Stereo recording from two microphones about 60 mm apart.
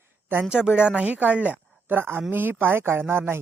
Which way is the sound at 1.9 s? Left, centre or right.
Right.